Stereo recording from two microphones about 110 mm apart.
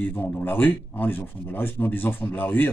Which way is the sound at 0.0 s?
20° left (ahead or behind).